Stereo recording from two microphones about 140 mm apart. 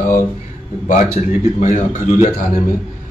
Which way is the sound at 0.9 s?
60° left (ahead or behind).